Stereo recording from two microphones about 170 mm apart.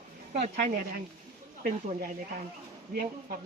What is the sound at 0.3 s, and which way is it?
Speech, 45° right (ahead or behind).